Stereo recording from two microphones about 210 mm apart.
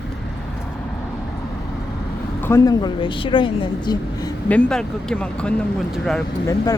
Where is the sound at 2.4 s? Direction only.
15° left (ahead or behind).